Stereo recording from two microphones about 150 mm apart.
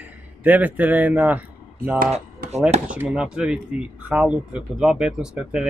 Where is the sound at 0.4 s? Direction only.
10° right (ahead or behind).